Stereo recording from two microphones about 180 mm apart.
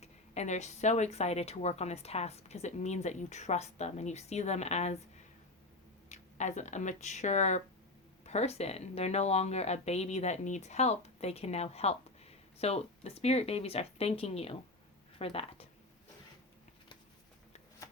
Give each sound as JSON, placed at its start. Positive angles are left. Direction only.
{"t": 0.0, "sound": "speech", "side_deg": 40}
{"t": 6.1, "sound": "speech", "side_deg": 40}